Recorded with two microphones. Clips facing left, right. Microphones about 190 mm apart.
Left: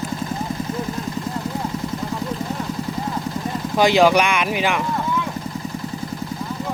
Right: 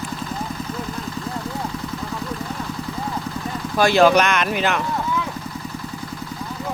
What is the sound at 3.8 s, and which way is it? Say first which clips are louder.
Speech: even; 15° left (ahead or behind).